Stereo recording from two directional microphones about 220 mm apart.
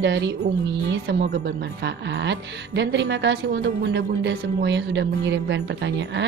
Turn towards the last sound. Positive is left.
turn(degrees=-50)  # may be behind; listen again after turning